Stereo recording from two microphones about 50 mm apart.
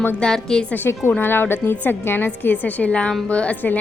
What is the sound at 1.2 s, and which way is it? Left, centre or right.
Speech, left.